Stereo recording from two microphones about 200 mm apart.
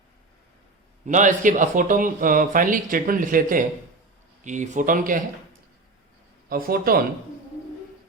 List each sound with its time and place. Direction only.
1.0 s speech: 40° right (ahead or behind)
6.5 s speech: 45° right (ahead or behind)